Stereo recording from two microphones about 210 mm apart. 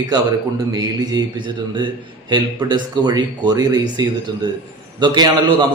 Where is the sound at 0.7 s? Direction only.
15° right (ahead or behind).